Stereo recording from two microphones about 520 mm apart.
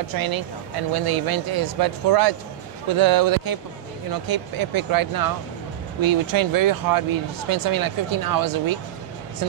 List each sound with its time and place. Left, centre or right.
0.1 s speech: right